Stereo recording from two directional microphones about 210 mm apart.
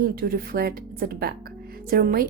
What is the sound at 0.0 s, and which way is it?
A woman's voice, 45° right (ahead or behind).